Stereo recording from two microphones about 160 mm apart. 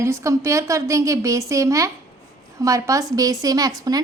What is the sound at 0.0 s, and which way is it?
A woman's voice, 20° right (ahead or behind).